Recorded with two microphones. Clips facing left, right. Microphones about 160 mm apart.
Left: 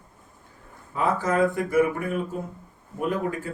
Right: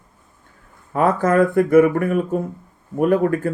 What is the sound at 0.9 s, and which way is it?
Speech, 55° right (ahead or behind).